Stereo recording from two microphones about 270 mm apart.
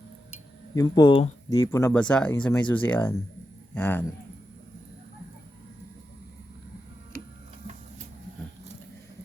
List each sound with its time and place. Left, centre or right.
0.8 s speech: centre